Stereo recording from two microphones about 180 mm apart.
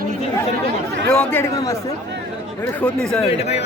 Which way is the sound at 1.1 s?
5° left (ahead or behind).